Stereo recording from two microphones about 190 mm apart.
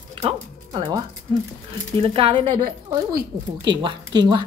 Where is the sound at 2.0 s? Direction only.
30° right (ahead or behind).